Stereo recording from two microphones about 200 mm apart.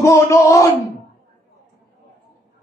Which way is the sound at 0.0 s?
15° left (ahead or behind).